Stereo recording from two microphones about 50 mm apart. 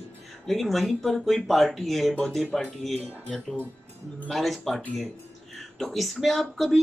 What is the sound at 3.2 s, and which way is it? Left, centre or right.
Speech, centre.